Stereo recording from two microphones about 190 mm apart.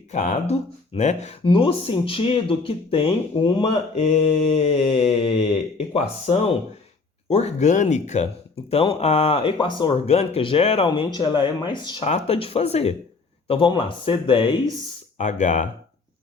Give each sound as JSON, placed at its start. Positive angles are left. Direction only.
{"t": 0.1, "sound": "speech", "side_deg": 40}
{"t": 15.2, "sound": "speech", "side_deg": 40}